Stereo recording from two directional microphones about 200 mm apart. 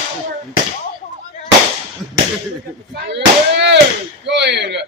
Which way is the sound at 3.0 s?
60° right (ahead or behind).